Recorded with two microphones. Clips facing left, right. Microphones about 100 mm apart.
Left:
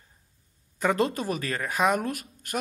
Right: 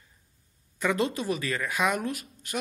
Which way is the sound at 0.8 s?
45° left (ahead or behind).